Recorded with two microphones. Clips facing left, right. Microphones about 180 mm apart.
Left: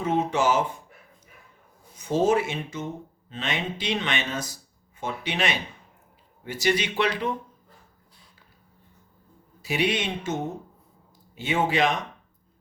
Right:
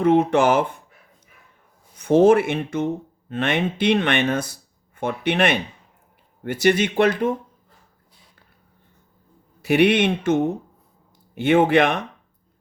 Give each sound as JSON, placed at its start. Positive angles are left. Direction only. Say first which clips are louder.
{"t": 0.0, "sound": "speech", "louder": "right 7 dB", "side_deg": -60}
{"t": 2.0, "sound": "speech", "louder": "right 8 dB", "side_deg": -60}
{"t": 9.6, "sound": "speech", "louder": "right 9 dB", "side_deg": -60}